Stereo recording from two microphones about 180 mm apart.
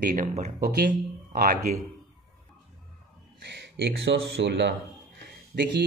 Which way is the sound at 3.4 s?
70° right (ahead or behind).